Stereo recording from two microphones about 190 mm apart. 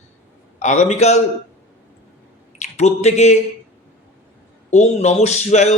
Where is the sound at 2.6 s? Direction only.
35° left (ahead or behind).